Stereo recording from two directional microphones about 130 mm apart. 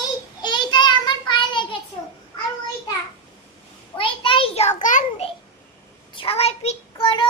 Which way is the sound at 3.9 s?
40° left (ahead or behind).